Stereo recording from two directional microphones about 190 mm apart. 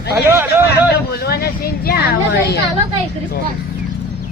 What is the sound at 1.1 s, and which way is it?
Speech, 55° left (ahead or behind).